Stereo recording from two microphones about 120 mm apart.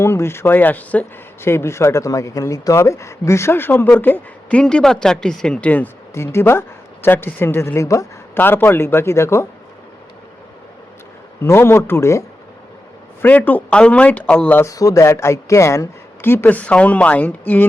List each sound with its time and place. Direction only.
0.0 s speech: 20° left (ahead or behind)
11.4 s speech: 20° left (ahead or behind)
13.2 s speech: 15° left (ahead or behind)
14.6 s speech: 30° left (ahead or behind)